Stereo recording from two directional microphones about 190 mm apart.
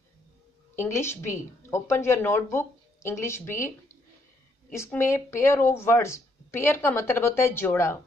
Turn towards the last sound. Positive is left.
turn(degrees=10)  # may be behind; listen again after turning